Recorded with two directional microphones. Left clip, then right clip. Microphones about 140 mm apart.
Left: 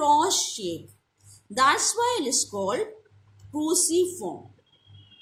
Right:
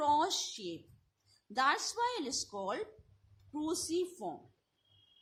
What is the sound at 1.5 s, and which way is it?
A woman's voice, 45° right (ahead or behind).